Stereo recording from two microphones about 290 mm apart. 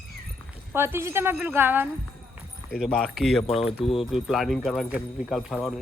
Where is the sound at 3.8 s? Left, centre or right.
Centre.